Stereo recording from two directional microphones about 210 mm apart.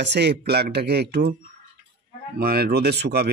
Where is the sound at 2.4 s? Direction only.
45° right (ahead or behind).